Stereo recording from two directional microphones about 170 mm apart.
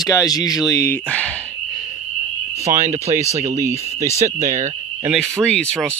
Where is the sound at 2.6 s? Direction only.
15° right (ahead or behind).